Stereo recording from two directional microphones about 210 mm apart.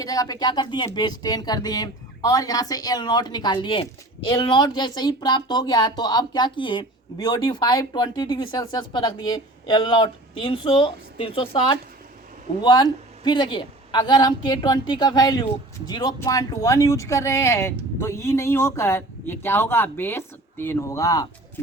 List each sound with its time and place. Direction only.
0.0 s speech: 15° left (ahead or behind)